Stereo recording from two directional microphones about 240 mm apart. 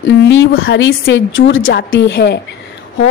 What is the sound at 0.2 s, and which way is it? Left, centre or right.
A woman's voice, left.